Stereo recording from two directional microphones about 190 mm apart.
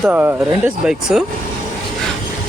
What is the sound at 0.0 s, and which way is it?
Speech, 10° right (ahead or behind).